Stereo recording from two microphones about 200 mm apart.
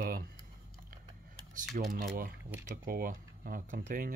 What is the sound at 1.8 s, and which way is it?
Speech, 40° right (ahead or behind).